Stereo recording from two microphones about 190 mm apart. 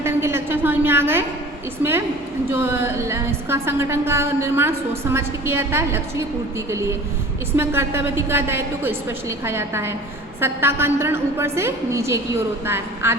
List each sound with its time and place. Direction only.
0.0 s a woman's voice: 15° right (ahead or behind)